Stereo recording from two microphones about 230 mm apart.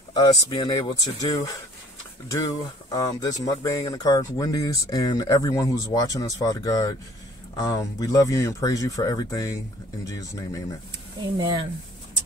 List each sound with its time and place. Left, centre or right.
0.1 s speech: centre
2.9 s speech: centre
11.3 s speech: right